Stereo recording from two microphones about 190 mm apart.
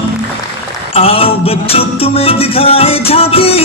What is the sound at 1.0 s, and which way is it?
Music, 30° left (ahead or behind).